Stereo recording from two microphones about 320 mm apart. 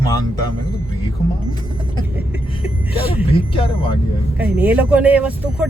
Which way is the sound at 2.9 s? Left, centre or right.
Centre.